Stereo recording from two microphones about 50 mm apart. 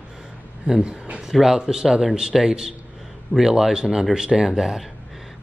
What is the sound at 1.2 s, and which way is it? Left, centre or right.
Speech, centre.